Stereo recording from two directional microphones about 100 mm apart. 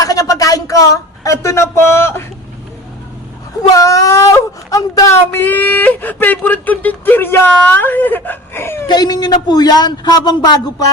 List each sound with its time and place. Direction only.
0.0 s speech: 35° left (ahead or behind)
3.6 s speech: 35° left (ahead or behind)
5.3 s speech: 20° left (ahead or behind)
8.9 s a man's voice: 45° left (ahead or behind)